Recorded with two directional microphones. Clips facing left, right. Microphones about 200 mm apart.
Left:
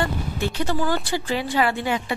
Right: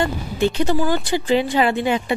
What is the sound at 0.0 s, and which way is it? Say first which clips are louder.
A woman's voice: right 5 dB; 20° right (ahead or behind).